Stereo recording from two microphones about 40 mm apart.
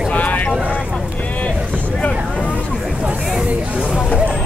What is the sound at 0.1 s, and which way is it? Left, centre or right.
Vehicle, left.